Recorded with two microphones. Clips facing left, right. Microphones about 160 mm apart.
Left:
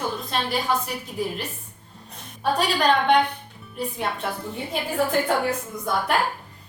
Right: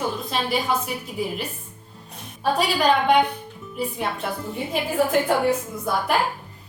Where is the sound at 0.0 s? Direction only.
5° right (ahead or behind).